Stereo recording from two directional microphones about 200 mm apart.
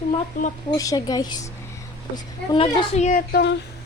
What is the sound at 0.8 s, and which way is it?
Speech, 20° left (ahead or behind).